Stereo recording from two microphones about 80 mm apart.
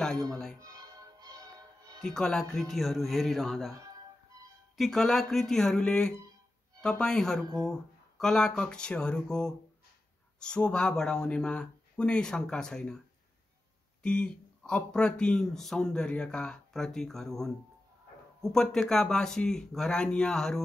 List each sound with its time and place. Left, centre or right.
0.0 s speech: centre
0.6 s music: right
2.0 s speech: centre
4.7 s speech: centre
14.0 s speech: centre